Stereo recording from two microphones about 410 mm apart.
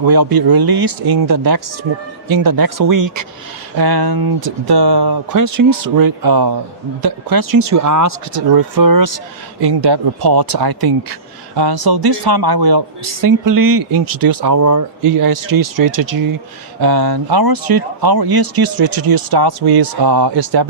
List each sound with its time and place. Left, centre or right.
0.0 s speech: right
3.8 s speech: right
9.6 s speech: right
13.2 s speech: right
16.8 s speech: right